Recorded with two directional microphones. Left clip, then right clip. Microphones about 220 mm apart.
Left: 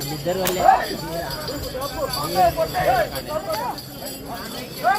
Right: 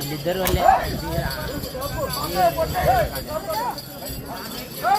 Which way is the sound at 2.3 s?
5° right (ahead or behind).